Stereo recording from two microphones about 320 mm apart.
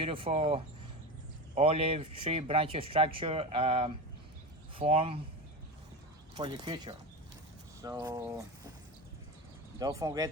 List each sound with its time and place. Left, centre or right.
0.0 s speech: centre
6.3 s speech: centre
9.7 s speech: centre